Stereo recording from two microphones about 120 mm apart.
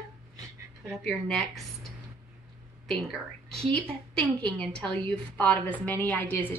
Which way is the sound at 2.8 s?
Centre (ahead or behind).